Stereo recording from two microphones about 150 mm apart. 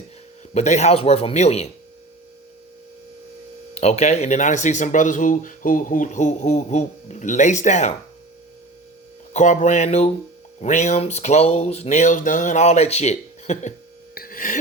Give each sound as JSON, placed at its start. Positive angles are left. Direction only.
{"t": 0.5, "sound": "speech", "side_deg": 50}
{"t": 3.8, "sound": "speech", "side_deg": 45}
{"t": 9.3, "sound": "speech", "side_deg": 55}
{"t": 14.2, "sound": "a sound", "side_deg": 70}